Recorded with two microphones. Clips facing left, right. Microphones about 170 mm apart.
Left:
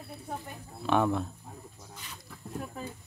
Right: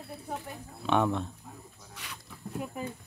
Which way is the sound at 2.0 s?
75° right (ahead or behind).